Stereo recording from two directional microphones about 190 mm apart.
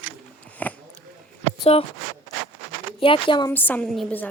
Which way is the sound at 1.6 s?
30° left (ahead or behind).